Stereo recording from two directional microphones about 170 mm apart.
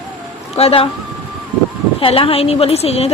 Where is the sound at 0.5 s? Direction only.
35° left (ahead or behind).